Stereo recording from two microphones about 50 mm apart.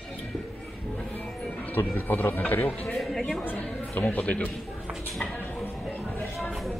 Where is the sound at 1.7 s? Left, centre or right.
Left.